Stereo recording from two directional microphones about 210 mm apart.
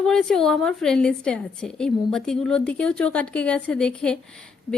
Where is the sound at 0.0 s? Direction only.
Centre (ahead or behind).